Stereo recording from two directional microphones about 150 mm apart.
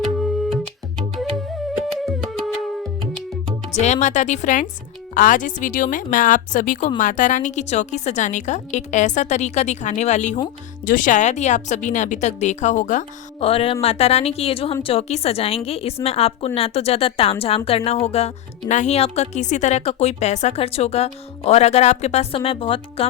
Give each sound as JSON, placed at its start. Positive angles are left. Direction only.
{"t": 2.0, "sound": "music", "side_deg": 0}
{"t": 3.8, "sound": "a woman's voice", "side_deg": 50}
{"t": 10.8, "sound": "a woman's voice", "side_deg": 60}
{"t": 13.4, "sound": "a woman's voice", "side_deg": 40}